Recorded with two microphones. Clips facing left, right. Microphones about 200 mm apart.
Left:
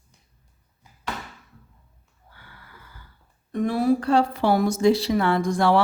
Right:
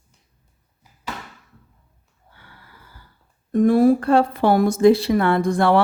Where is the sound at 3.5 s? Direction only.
45° right (ahead or behind).